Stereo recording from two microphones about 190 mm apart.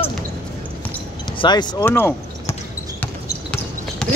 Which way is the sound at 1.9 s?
10° left (ahead or behind).